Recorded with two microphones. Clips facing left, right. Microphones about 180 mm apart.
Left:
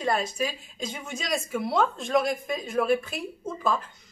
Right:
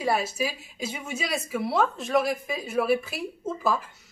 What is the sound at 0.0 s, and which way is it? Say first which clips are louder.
A woman's voice: right 1 dB; 5° right (ahead or behind).